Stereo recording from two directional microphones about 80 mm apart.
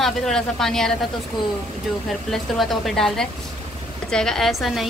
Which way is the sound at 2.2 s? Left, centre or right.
Centre.